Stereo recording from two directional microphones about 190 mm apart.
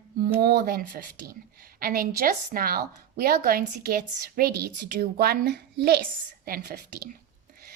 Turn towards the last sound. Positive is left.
turn(degrees=-55)  # may be behind; listen again after turning